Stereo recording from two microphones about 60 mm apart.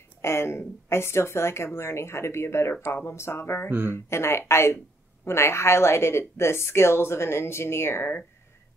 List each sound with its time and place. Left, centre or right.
0.2 s speech: left
3.7 s speech: right
4.1 s speech: left